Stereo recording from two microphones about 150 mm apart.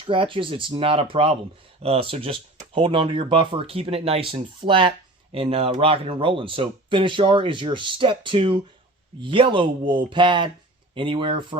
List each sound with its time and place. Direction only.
0.0 s speech: 35° right (ahead or behind)